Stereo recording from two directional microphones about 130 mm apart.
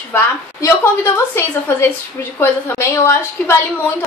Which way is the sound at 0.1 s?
20° left (ahead or behind).